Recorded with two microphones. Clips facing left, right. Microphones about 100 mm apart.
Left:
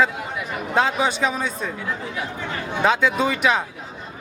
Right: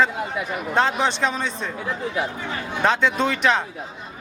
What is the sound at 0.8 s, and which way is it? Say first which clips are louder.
Speech: even; 5° left (ahead or behind).